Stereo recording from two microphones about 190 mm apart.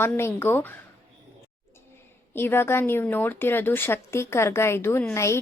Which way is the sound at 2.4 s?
10° left (ahead or behind).